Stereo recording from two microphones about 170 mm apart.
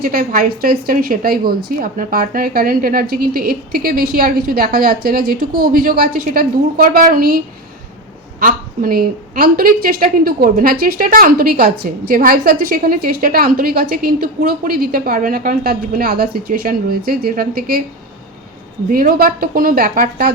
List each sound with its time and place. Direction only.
0.0 s a woman's voice: 60° right (ahead or behind)
18.9 s a woman's voice: 55° right (ahead or behind)